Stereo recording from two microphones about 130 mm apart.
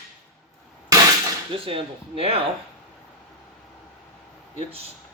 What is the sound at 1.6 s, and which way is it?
Speech, 45° right (ahead or behind).